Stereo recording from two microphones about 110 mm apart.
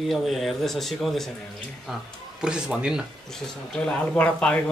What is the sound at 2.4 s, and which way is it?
Speech, 5° right (ahead or behind).